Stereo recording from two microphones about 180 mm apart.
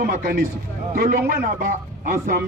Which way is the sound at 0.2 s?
50° right (ahead or behind).